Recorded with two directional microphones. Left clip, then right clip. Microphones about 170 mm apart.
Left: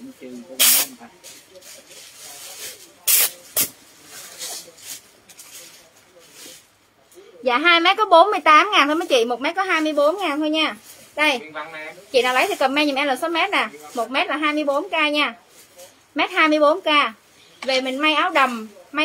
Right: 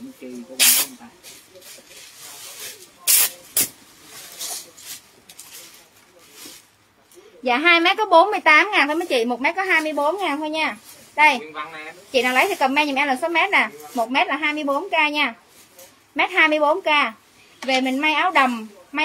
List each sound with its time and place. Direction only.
0.2 s spray: 5° left (ahead or behind)
3.2 s spray: centre (ahead or behind)
7.4 s a woman's voice: 15° left (ahead or behind)
12.1 s a woman's voice: 25° left (ahead or behind)